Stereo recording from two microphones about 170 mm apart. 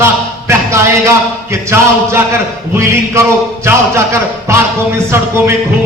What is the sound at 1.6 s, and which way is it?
Speech, 15° right (ahead or behind).